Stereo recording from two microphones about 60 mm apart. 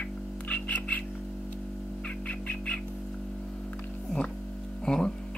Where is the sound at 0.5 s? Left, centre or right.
Left.